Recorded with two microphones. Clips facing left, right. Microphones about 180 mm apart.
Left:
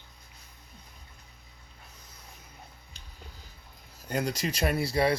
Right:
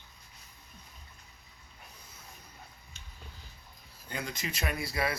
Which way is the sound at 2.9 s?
35° left (ahead or behind).